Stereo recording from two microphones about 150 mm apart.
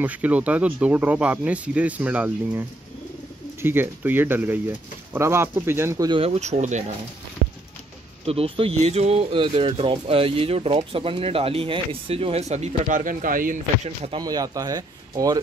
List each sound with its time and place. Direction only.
0.0 s speech: 10° right (ahead or behind)
3.6 s speech: 15° right (ahead or behind)
6.0 s speech: 40° right (ahead or behind)
8.3 s speech: 40° right (ahead or behind); by 13.6 s 65° right (ahead or behind)
13.8 s speech: 45° right (ahead or behind)
14.2 s speech: 25° right (ahead or behind)